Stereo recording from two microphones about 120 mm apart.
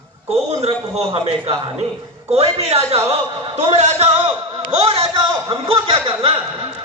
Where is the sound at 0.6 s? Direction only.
60° right (ahead or behind).